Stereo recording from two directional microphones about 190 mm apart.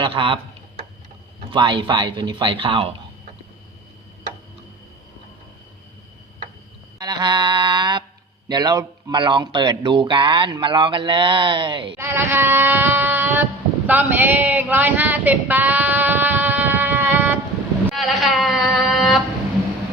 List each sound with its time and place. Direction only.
0.0 s speech: 30° right (ahead or behind)
1.5 s speech: 25° right (ahead or behind)
7.0 s music: 20° right (ahead or behind)
8.4 s speech: 20° right (ahead or behind)
11.9 s a sound: 15° right (ahead or behind)